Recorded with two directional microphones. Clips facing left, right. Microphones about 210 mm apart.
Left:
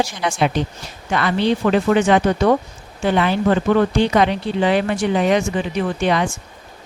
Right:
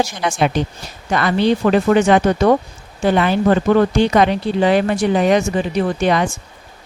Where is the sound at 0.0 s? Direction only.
45° right (ahead or behind).